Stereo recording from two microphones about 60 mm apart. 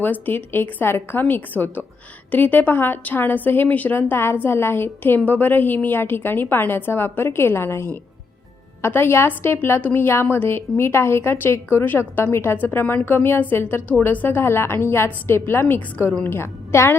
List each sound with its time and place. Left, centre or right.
0.0 s a woman's voice: left
4.2 s a woman's voice: left
12.5 s a woman's voice: left